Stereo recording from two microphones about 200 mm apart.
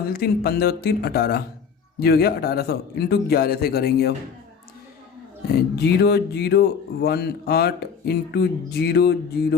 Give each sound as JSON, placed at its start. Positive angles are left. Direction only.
{"t": 0.1, "sound": "speech", "side_deg": 50}
{"t": 5.7, "sound": "speech", "side_deg": 55}